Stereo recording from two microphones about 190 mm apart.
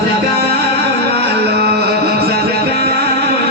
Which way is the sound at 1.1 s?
60° right (ahead or behind).